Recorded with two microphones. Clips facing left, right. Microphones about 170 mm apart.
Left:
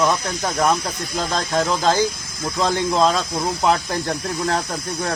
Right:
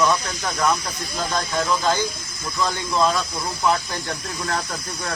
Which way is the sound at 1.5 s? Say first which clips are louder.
Left 4 dB; 35° left (ahead or behind).